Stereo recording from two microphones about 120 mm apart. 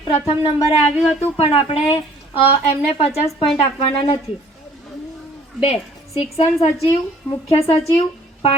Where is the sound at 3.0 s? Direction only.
60° left (ahead or behind).